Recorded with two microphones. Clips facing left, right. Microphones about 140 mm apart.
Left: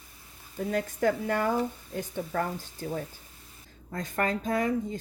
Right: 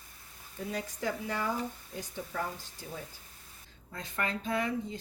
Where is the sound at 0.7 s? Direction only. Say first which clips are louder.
Left 9 dB; 55° left (ahead or behind).